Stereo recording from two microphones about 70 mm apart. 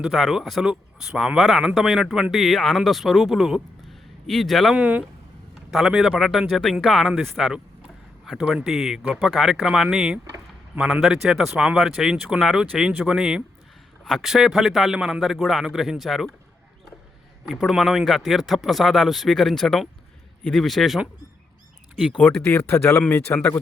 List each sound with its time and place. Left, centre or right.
0.0 s speech: centre
4.7 s speech: centre
6.1 s speech: centre
17.7 s speech: centre
22.4 s speech: left
23.0 s a man's voice: left